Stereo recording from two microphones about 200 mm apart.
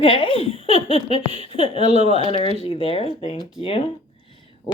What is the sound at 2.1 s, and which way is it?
Speech, 25° left (ahead or behind).